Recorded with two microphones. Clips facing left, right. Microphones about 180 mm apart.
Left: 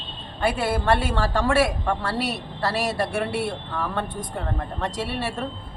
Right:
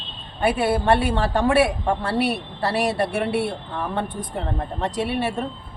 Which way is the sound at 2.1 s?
60° right (ahead or behind).